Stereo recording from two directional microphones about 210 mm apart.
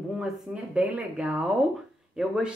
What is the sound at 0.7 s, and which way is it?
Speech, 5° right (ahead or behind).